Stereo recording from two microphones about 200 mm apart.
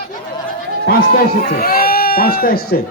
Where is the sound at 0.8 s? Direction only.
40° left (ahead or behind).